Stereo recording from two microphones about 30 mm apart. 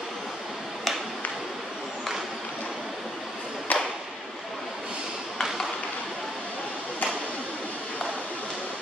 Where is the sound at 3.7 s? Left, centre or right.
Left.